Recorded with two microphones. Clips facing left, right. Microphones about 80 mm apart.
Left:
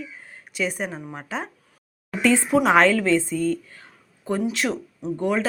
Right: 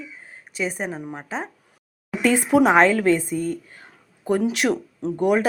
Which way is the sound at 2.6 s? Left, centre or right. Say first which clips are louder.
Even; centre.